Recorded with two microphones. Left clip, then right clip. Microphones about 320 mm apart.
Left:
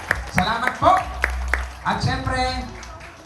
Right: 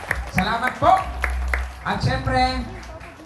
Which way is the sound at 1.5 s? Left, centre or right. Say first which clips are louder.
Left 2 dB; left.